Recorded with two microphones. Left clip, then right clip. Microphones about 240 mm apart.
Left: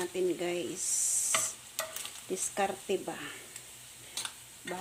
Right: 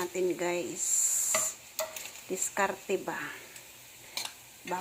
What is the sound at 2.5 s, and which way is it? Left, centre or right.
Sizzle, centre.